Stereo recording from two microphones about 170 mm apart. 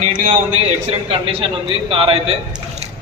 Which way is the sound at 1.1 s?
30° right (ahead or behind).